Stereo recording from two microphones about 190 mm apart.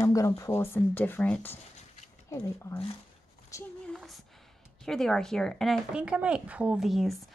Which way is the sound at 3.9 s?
Centre (ahead or behind).